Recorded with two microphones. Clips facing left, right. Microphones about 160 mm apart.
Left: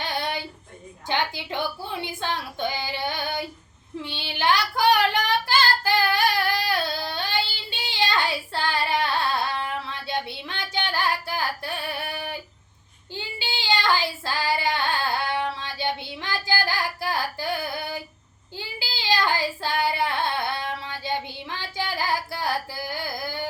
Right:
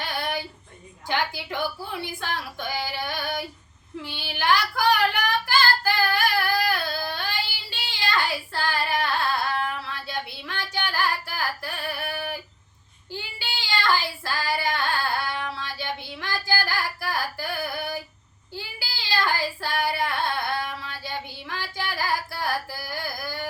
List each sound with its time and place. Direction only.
0.2 s female singing: 20° left (ahead or behind)
1.0 s speech: 20° left (ahead or behind)
4.0 s child singing: 20° left (ahead or behind)
5.5 s singing: 20° left (ahead or behind)
13.1 s child singing: 20° left (ahead or behind)